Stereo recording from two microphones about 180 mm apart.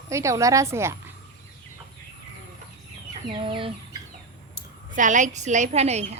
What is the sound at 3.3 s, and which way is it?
Chicken, 30° right (ahead or behind).